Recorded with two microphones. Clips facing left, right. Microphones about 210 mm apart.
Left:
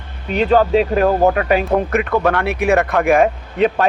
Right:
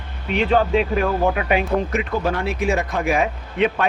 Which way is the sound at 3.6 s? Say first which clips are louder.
Left 4 dB; 40° left (ahead or behind).